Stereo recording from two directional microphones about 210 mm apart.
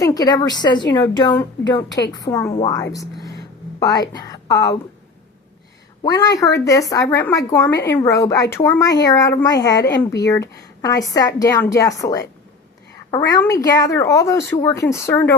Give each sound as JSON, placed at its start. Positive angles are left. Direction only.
{"t": 0.0, "sound": "a woman's voice", "side_deg": 15}
{"t": 2.9, "sound": "a sound", "side_deg": 15}
{"t": 6.0, "sound": "a woman's voice", "side_deg": 20}